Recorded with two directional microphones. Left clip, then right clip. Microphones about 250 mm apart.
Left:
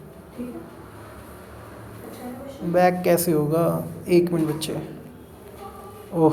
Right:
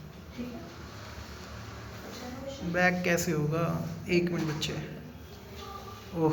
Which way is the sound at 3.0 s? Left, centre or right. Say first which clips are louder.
Left 9 dB; left.